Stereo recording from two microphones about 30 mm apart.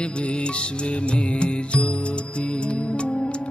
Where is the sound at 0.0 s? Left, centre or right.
Left.